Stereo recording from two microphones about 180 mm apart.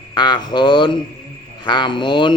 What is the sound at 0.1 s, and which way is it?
A man's voice, 25° left (ahead or behind).